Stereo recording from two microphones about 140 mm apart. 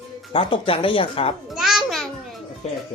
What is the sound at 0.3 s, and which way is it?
Speech, 40° left (ahead or behind).